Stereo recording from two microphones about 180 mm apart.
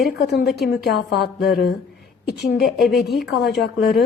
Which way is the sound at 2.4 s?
70° left (ahead or behind).